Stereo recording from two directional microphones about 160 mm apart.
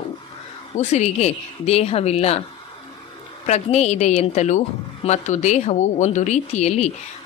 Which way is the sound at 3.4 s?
45° left (ahead or behind).